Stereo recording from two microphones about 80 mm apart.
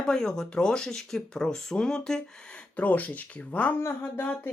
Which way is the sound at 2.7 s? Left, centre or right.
Left.